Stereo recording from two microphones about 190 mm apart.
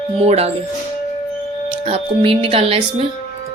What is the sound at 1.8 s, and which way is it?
Speech, 30° right (ahead or behind).